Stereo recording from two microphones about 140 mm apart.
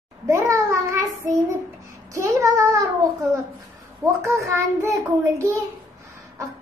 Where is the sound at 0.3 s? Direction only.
20° right (ahead or behind).